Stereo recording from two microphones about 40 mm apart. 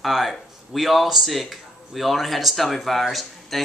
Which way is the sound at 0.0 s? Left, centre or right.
Centre.